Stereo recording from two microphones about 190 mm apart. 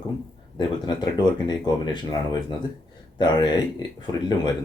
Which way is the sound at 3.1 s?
25° left (ahead or behind).